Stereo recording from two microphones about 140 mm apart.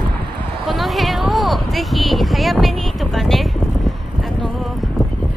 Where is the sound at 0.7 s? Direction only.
Centre (ahead or behind).